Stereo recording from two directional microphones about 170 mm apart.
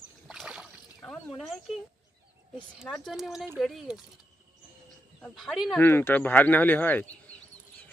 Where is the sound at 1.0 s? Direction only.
5° left (ahead or behind).